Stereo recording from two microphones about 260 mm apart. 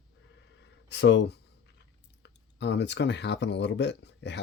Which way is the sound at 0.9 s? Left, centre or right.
Left.